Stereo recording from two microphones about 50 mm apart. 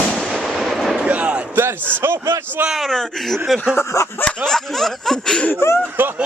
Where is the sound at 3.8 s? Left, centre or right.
Left.